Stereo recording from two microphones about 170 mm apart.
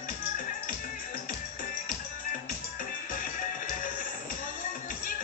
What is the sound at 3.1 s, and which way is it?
Music, 50° left (ahead or behind).